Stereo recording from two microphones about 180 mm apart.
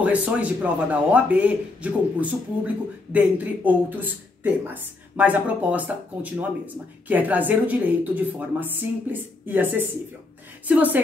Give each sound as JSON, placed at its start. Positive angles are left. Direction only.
{"t": 0.0, "sound": "speech", "side_deg": -5}